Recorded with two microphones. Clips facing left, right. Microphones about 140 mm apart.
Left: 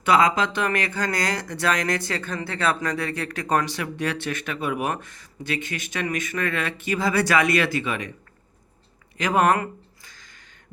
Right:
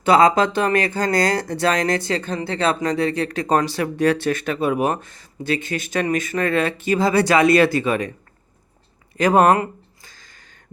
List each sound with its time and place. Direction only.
0.0 s speech: 35° right (ahead or behind)
9.1 s speech: 40° right (ahead or behind)
9.6 s a sound: 30° right (ahead or behind)